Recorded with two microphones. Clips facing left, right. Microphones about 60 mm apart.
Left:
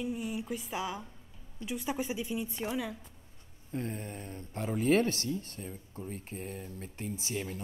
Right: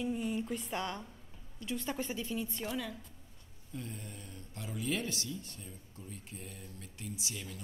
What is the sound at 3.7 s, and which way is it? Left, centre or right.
Speech, left.